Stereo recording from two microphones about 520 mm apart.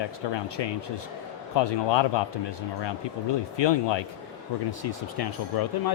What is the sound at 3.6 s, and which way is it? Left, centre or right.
Speech, left.